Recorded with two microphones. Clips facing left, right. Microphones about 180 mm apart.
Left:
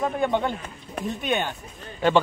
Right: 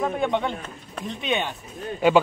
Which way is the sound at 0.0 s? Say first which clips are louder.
Even; centre (ahead or behind).